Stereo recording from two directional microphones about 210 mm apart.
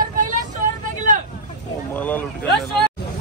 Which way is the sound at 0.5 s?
40° right (ahead or behind).